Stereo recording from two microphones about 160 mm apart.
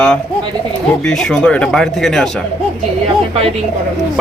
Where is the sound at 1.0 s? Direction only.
5° left (ahead or behind).